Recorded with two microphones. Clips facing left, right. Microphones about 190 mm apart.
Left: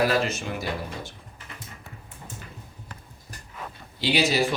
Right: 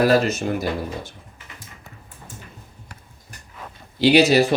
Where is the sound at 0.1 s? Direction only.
40° right (ahead or behind).